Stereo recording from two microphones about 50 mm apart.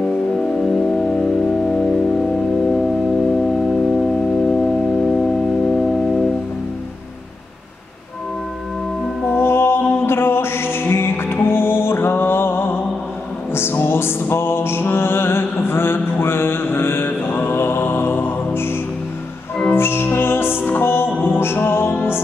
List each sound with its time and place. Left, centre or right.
0.4 s organ: centre
2.7 s organ: centre
9.3 s music: left